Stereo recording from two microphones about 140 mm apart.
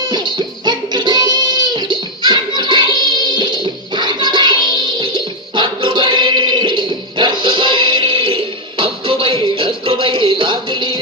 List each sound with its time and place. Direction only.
0.1 s music: 30° right (ahead or behind)